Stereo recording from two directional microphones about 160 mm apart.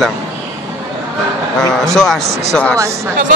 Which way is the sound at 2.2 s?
90° right.